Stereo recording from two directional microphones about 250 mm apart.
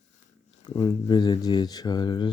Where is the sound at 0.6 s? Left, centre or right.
Centre.